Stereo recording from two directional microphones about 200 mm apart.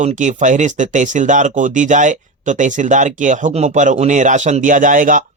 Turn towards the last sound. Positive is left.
turn(degrees=-40)  # may be behind; listen again after turning